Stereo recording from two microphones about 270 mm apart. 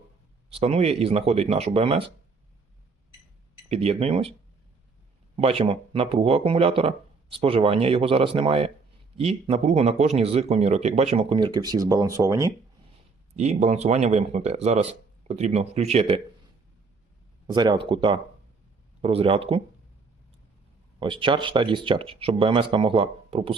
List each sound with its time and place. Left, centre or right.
0.5 s speech: right
3.7 s speech: right
5.4 s speech: right
13.3 s speech: right
17.4 s speech: centre
21.0 s speech: centre